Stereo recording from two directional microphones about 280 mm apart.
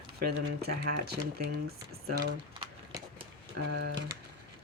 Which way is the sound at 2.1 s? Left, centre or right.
Right.